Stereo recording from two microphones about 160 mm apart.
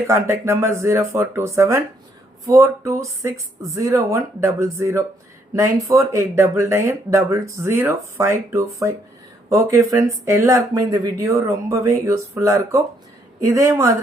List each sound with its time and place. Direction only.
0.1 s speech: 15° right (ahead or behind)